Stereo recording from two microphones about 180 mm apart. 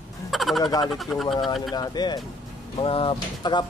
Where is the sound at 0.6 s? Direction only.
20° left (ahead or behind).